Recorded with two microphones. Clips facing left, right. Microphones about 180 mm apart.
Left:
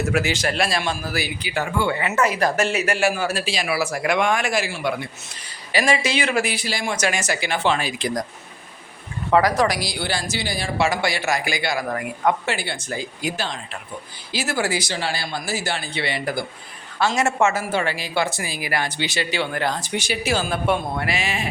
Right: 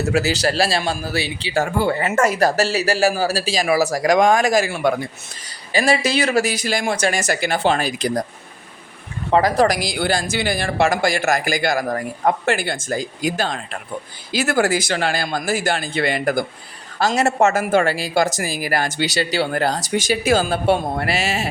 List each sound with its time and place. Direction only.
0.0 s speech: 40° right (ahead or behind)
1.5 s speech: 40° right (ahead or behind)
5.7 s speech: 35° right (ahead or behind)
6.9 s speech: 35° right (ahead or behind)
9.3 s speech: 25° right (ahead or behind)
9.6 s speech: 50° right (ahead or behind)
17.0 s speech: 40° right (ahead or behind)
20.5 s speech: 35° right (ahead or behind)